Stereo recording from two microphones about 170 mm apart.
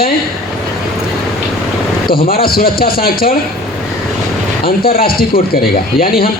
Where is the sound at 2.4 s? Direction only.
60° left (ahead or behind).